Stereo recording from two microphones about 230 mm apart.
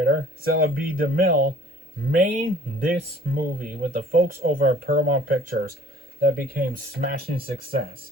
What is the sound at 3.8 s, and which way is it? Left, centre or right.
Speech, right.